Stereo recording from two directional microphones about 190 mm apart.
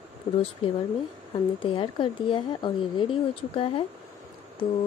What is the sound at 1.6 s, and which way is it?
A woman's voice, 25° left (ahead or behind).